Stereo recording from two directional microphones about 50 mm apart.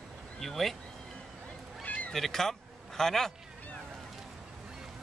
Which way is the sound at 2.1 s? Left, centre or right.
Centre.